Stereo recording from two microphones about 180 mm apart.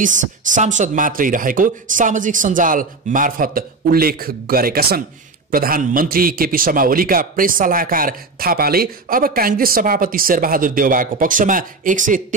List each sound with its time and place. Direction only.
0.0 s a man's voice: 45° right (ahead or behind)